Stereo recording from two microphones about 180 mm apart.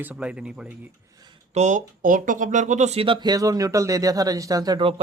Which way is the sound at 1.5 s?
45° right (ahead or behind).